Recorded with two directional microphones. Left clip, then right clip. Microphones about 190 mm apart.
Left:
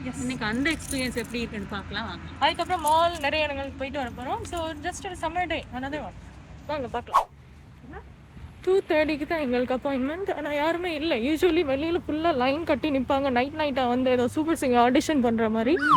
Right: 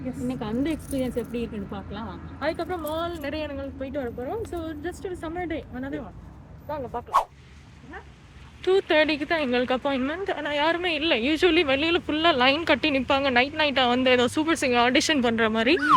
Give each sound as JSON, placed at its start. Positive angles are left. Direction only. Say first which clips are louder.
{"t": 0.3, "sound": "speech", "louder": "left 2 dB", "side_deg": -20}
{"t": 2.6, "sound": "speech", "louder": "left 7 dB", "side_deg": 5}
{"t": 8.6, "sound": "speech", "louder": "right 2 dB", "side_deg": 5}